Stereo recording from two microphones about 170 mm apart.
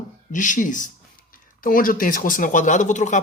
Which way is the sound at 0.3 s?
50° left (ahead or behind).